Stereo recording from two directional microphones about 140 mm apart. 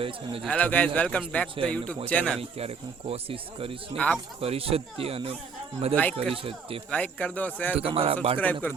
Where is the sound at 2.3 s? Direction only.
45° right (ahead or behind).